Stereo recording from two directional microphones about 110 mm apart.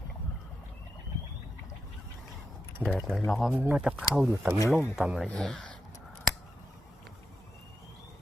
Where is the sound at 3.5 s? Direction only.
15° right (ahead or behind).